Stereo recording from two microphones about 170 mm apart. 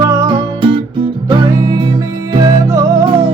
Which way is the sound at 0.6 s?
30° right (ahead or behind).